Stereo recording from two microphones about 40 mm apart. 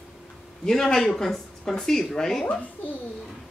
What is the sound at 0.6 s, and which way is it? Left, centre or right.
Speech, centre.